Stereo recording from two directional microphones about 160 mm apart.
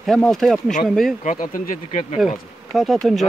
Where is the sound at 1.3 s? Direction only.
55° left (ahead or behind).